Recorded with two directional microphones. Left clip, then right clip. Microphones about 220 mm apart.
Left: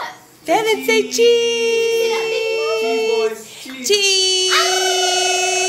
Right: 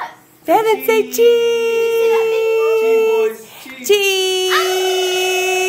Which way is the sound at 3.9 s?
45° right (ahead or behind).